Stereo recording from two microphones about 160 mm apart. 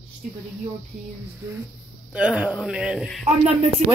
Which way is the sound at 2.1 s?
5° right (ahead or behind).